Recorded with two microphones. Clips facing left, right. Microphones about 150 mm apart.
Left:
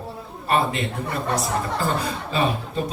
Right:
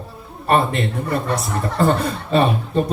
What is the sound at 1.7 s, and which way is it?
Speech, 50° right (ahead or behind).